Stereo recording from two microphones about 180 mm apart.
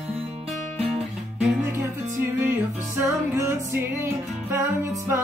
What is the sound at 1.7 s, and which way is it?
Music, 10° right (ahead or behind).